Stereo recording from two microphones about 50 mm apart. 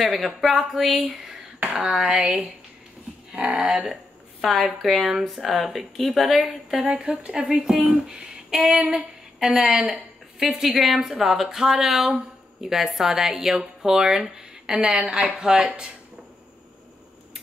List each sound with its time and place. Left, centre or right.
0.0 s a woman's voice: centre
3.3 s speech: centre
3.8 s a sound: centre
4.8 s a woman's voice: centre
6.9 s a woman's voice: right